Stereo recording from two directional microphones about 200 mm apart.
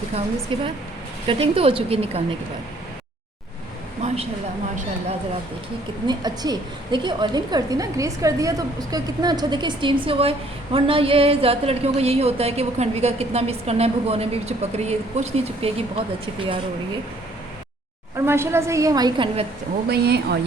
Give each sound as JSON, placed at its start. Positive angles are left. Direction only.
{"t": 0.5, "sound": "a woman's voice", "side_deg": -25}
{"t": 4.0, "sound": "a woman's voice", "side_deg": -30}
{"t": 6.1, "sound": "a woman's voice", "side_deg": -20}
{"t": 18.3, "sound": "a woman's voice", "side_deg": -10}
{"t": 19.9, "sound": "speech", "side_deg": -55}